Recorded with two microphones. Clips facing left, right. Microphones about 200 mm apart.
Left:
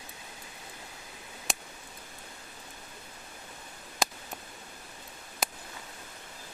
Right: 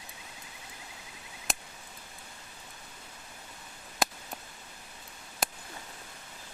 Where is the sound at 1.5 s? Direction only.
Centre (ahead or behind).